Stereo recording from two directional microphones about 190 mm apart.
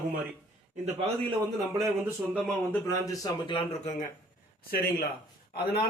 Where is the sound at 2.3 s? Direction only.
5° left (ahead or behind).